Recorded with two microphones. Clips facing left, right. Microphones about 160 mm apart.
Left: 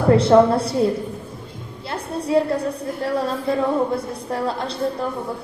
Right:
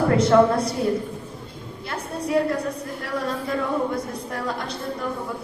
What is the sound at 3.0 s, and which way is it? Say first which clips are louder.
A woman's voice: left 5 dB; 30° left (ahead or behind).